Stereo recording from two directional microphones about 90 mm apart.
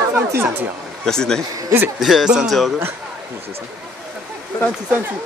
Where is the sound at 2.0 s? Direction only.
5° right (ahead or behind).